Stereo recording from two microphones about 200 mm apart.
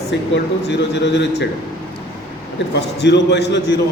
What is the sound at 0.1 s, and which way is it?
Speech, 60° left (ahead or behind).